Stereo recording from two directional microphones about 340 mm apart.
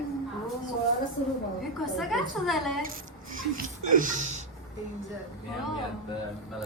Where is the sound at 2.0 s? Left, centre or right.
Centre.